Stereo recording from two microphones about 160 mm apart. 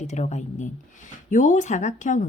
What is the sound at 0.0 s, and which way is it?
Speech, 45° left (ahead or behind).